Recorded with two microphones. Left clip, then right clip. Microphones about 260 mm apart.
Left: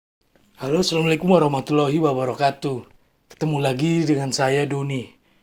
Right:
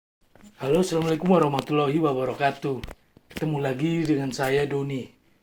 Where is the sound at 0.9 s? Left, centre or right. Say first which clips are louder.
Left 5 dB; left.